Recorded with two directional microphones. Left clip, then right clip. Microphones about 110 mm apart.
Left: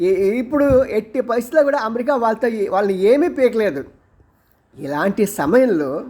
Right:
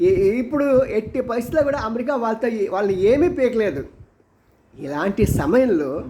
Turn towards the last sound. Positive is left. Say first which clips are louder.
# left 3 dB
turn(degrees=35)  # may be behind; listen again after turning